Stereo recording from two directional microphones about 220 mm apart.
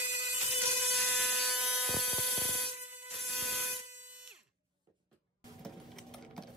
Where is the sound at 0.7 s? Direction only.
Centre (ahead or behind).